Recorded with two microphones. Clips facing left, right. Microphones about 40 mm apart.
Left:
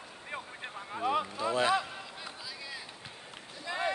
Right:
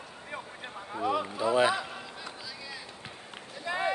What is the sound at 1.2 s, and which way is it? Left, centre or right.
Speech, centre.